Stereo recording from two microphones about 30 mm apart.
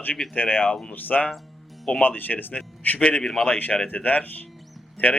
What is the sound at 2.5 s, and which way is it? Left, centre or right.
Speech, left.